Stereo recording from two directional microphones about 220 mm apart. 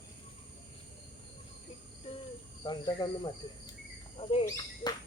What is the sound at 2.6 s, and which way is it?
Speech, 20° left (ahead or behind).